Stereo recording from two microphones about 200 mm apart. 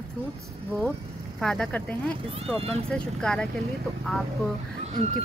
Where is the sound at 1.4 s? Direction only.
Centre (ahead or behind).